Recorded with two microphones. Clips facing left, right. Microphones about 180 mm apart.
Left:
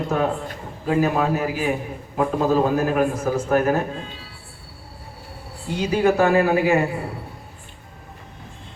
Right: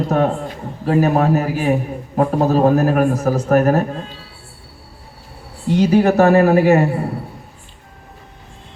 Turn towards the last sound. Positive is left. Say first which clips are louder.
# right 6 dB
turn(degrees=-40)  # may be behind; listen again after turning